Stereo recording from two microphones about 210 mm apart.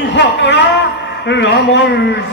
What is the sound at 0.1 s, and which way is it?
Speech, 60° left (ahead or behind).